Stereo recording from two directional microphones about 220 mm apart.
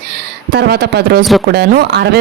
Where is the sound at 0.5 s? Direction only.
45° right (ahead or behind).